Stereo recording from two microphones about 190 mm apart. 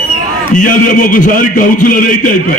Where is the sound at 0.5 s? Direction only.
45° left (ahead or behind).